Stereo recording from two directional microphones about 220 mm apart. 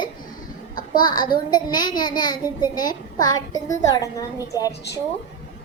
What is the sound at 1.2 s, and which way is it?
A child's voice, 20° left (ahead or behind).